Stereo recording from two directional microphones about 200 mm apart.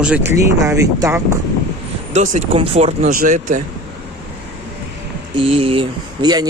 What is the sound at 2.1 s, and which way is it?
Speech, 35° right (ahead or behind).